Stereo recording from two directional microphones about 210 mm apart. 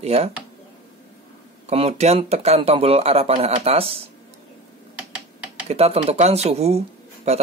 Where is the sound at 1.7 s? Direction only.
30° right (ahead or behind).